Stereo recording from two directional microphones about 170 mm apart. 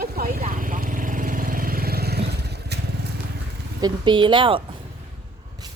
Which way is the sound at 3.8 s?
25° right (ahead or behind).